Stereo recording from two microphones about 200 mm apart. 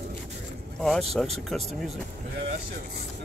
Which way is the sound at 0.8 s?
Centre (ahead or behind).